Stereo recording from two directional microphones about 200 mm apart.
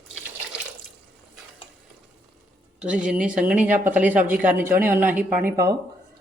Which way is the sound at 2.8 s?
5° right (ahead or behind).